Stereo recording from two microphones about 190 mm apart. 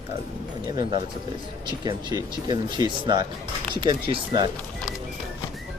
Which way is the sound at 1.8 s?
25° right (ahead or behind).